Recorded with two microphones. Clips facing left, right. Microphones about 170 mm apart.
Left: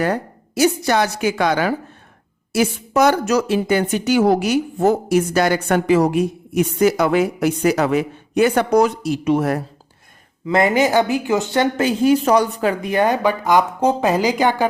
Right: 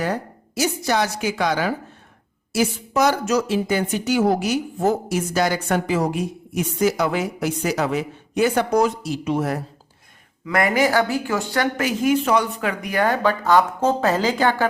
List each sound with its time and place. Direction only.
0.0 s speech: 60° left (ahead or behind)
10.4 s speech: 25° left (ahead or behind)